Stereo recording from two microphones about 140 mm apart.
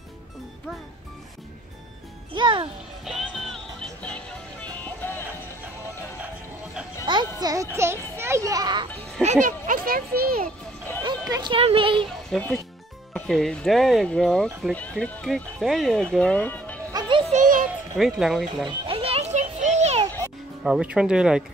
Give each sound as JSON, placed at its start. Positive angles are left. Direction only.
{"t": 2.3, "sound": "a child's voice", "side_deg": -35}
{"t": 3.1, "sound": "music", "side_deg": 0}
{"t": 7.1, "sound": "a sound", "side_deg": -30}
{"t": 8.5, "sound": "children playing", "side_deg": -30}
{"t": 9.2, "sound": "a child's voice", "side_deg": -60}
{"t": 11.0, "sound": "music", "side_deg": -25}
{"t": 11.5, "sound": "a child's voice", "side_deg": -40}
{"t": 12.3, "sound": "speech", "side_deg": 10}
{"t": 15.2, "sound": "speech", "side_deg": 0}
{"t": 17.3, "sound": "music", "side_deg": -65}
{"t": 17.9, "sound": "speech", "side_deg": 0}
{"t": 18.7, "sound": "music", "side_deg": -40}
{"t": 20.6, "sound": "speech", "side_deg": -5}